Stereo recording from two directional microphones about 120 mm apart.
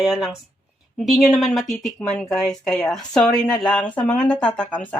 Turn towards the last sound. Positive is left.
turn(degrees=10)  # may be behind; listen again after turning